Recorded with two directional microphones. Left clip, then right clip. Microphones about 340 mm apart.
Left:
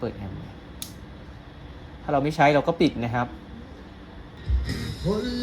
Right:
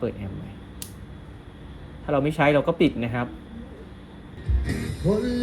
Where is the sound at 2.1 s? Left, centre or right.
Centre.